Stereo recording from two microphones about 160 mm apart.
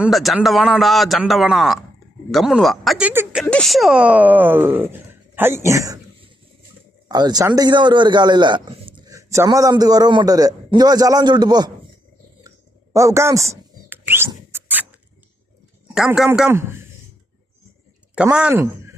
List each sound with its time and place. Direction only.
0.0 s a man's voice: centre (ahead or behind)
3.1 s speech: 10° right (ahead or behind)
3.4 s speech: 5° left (ahead or behind); by 6.0 s 20° right (ahead or behind)
7.1 s a man's voice: 25° right (ahead or behind)
12.4 s a sound: 20° right (ahead or behind)
16.0 s a man's voice: 5° right (ahead or behind)
16.5 s speech: 15° right (ahead or behind)
18.1 s speech: 5° right (ahead or behind)